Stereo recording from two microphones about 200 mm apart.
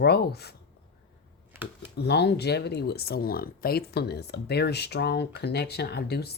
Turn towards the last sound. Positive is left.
turn(degrees=55)  # may be behind; listen again after turning